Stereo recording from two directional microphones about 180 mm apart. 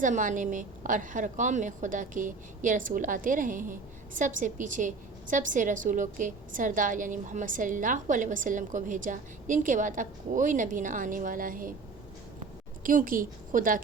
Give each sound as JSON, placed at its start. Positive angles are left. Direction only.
{"t": 0.0, "sound": "a woman's voice", "side_deg": -45}
{"t": 12.8, "sound": "a woman's voice", "side_deg": -50}